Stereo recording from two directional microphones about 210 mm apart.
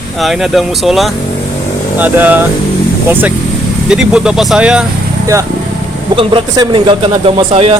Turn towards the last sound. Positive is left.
turn(degrees=-25)  # may be behind; listen again after turning